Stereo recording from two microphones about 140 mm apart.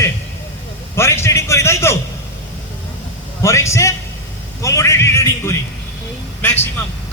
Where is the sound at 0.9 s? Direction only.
20° left (ahead or behind).